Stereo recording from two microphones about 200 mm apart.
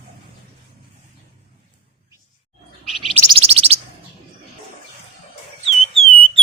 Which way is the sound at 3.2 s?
30° right (ahead or behind).